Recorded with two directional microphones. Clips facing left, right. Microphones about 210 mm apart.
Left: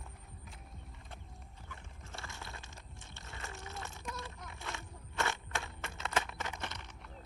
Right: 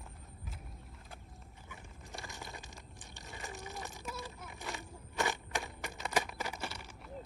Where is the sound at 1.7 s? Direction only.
15° right (ahead or behind).